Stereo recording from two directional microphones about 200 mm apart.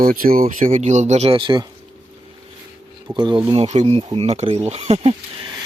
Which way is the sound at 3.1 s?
20° right (ahead or behind).